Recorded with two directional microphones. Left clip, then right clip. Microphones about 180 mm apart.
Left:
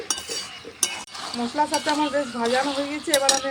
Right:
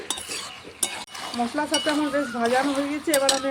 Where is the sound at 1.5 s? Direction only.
35° right (ahead or behind).